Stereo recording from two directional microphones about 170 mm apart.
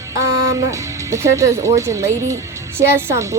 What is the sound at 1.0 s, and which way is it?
Speech, 15° right (ahead or behind).